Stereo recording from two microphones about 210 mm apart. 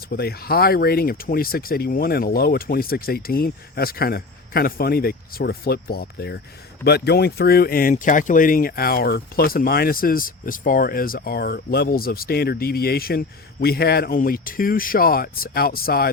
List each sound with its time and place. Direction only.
0.1 s speech: 45° left (ahead or behind)